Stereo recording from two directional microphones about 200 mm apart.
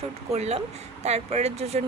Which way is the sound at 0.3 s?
35° right (ahead or behind).